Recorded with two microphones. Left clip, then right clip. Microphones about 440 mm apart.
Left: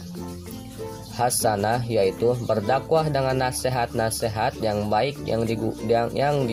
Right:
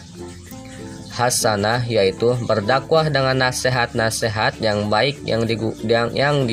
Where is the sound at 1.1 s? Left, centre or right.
Left.